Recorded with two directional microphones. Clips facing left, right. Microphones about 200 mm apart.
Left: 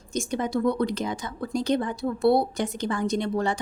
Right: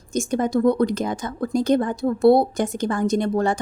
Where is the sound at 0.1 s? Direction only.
45° right (ahead or behind).